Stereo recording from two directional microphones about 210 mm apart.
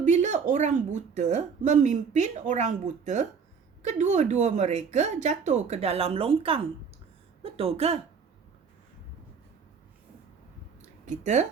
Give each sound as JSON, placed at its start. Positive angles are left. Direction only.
{"t": 0.0, "sound": "a woman's voice", "side_deg": -35}
{"t": 11.0, "sound": "speech", "side_deg": -35}